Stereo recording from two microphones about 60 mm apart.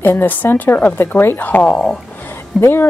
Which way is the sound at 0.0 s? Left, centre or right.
Left.